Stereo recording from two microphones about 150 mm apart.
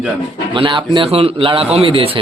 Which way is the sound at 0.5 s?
35° right (ahead or behind).